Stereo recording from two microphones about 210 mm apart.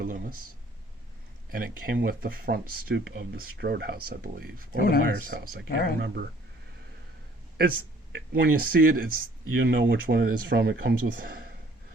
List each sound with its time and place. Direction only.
0.0 s speech: 40° right (ahead or behind)
1.5 s speech: 45° right (ahead or behind)
4.8 s speech: 45° left (ahead or behind)
5.3 s speech: 55° right (ahead or behind)
5.6 s speech: 45° left (ahead or behind)
7.5 s speech: 50° right (ahead or behind)
9.6 s speech: 55° right (ahead or behind)